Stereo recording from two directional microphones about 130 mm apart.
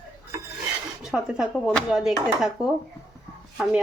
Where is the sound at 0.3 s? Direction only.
25° right (ahead or behind).